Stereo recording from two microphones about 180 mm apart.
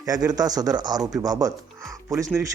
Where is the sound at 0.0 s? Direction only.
20° right (ahead or behind).